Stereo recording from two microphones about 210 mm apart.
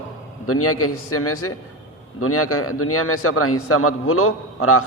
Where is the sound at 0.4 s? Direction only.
90° left.